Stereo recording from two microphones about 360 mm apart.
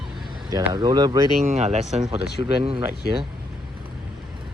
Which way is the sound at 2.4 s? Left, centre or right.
Centre.